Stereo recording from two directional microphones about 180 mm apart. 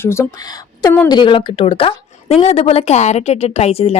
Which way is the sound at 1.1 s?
25° left (ahead or behind).